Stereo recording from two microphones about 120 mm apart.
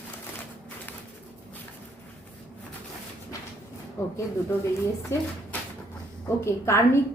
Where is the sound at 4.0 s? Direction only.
25° left (ahead or behind).